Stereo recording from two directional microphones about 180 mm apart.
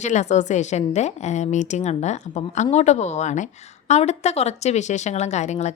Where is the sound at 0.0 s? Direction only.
40° left (ahead or behind).